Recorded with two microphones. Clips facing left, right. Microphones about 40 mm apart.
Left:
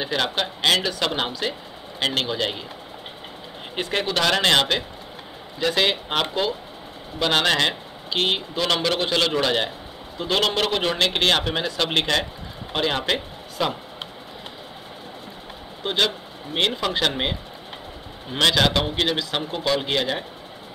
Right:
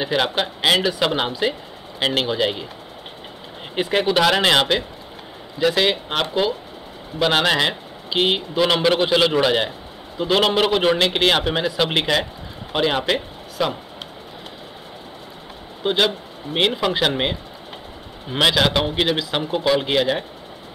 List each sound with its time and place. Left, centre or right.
0.0 s speech: centre
3.7 s speech: centre
15.8 s speech: centre